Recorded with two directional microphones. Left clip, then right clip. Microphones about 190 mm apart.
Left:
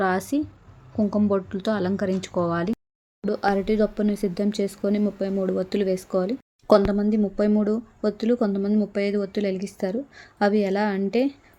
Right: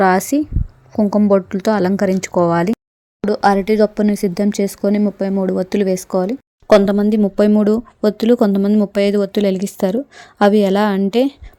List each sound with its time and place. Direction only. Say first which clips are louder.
0.0 s speech: right 10 dB; 40° right (ahead or behind)